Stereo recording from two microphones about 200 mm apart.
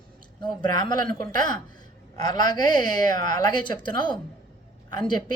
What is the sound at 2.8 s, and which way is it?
Speech, 40° right (ahead or behind).